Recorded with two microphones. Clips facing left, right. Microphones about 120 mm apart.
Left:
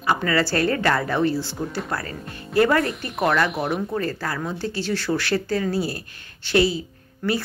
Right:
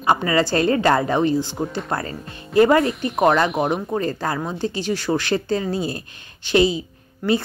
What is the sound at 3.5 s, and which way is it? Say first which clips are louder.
Speech: right 4 dB; 45° right (ahead or behind).